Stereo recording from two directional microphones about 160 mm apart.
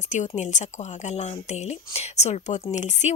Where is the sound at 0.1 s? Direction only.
50° left (ahead or behind).